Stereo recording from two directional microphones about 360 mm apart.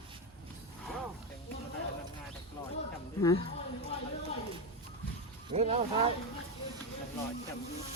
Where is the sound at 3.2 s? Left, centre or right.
Centre.